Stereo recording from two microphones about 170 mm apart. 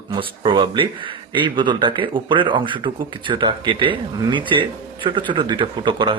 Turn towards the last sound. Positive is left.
turn(degrees=-30)  # may be behind; listen again after turning